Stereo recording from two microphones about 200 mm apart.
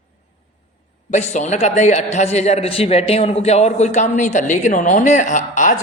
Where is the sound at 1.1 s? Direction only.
35° left (ahead or behind).